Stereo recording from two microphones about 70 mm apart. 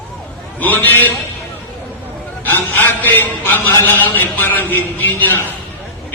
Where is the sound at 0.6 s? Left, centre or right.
Left.